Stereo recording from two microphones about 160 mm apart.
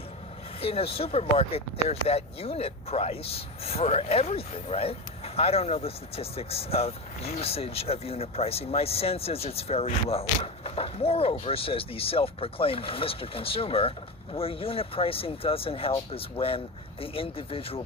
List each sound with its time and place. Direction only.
0.6 s speech: 40° left (ahead or behind)